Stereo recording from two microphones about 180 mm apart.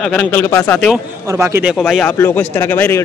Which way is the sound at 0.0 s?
5° left (ahead or behind).